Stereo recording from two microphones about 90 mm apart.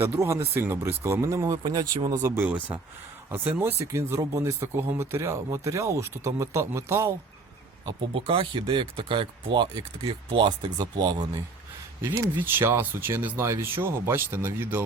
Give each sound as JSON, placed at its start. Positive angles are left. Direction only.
{"t": 0.0, "sound": "speech", "side_deg": -30}
{"t": 1.6, "sound": "speech", "side_deg": -45}
{"t": 2.3, "sound": "speech", "side_deg": -20}
{"t": 8.1, "sound": "speech", "side_deg": -75}
{"t": 12.4, "sound": "speech", "side_deg": -25}